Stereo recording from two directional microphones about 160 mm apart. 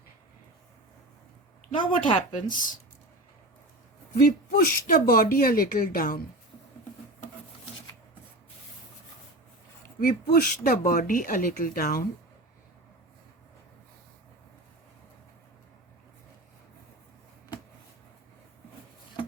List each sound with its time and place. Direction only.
1.7 s speech: 30° left (ahead or behind)
4.5 s speech: 60° left (ahead or behind)
10.0 s speech: 60° left (ahead or behind)